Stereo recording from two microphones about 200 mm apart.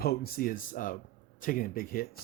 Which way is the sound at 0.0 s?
50° left (ahead or behind).